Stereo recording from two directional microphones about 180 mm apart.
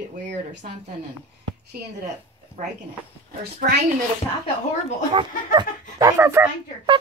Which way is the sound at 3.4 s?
60° right (ahead or behind).